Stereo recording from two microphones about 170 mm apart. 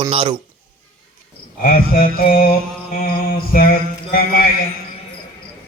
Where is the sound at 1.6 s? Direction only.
55° left (ahead or behind).